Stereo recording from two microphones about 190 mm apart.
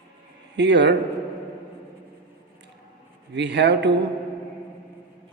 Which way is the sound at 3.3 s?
65° right (ahead or behind).